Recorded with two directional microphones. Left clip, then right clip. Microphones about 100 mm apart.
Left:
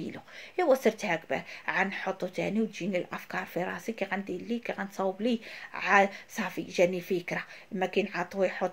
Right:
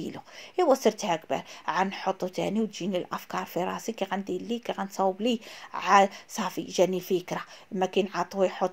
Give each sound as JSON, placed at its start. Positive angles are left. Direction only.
{"t": 0.0, "sound": "a woman's voice", "side_deg": -40}